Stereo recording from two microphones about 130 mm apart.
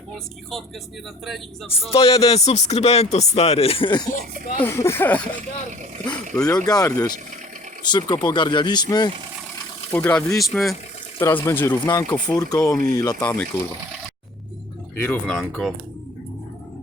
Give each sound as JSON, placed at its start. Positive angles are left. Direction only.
{"t": 1.7, "sound": "speech", "side_deg": 45}
{"t": 4.5, "sound": "speech", "side_deg": 15}
{"t": 6.3, "sound": "speech", "side_deg": 5}
{"t": 6.7, "sound": "speech", "side_deg": 30}
{"t": 9.9, "sound": "speech", "side_deg": 15}
{"t": 10.3, "sound": "speech", "side_deg": 0}
{"t": 11.2, "sound": "speech", "side_deg": 20}
{"t": 11.9, "sound": "speech", "side_deg": 30}
{"t": 13.1, "sound": "speech", "side_deg": 10}
{"t": 14.9, "sound": "speech", "side_deg": 15}